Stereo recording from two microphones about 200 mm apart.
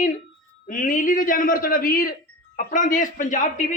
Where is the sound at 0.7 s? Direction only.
40° left (ahead or behind).